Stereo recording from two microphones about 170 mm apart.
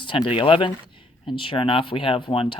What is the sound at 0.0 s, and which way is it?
Speech, 30° left (ahead or behind).